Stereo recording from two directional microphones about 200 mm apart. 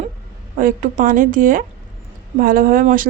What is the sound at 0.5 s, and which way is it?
Speech, 40° right (ahead or behind).